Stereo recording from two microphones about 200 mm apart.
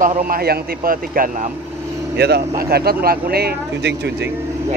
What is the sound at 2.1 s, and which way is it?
Speech, 55° right (ahead or behind).